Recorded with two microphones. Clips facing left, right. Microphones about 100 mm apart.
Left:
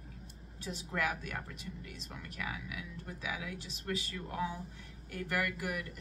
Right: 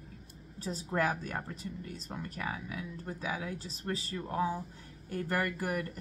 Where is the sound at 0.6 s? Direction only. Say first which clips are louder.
Right 5 dB; 35° right (ahead or behind).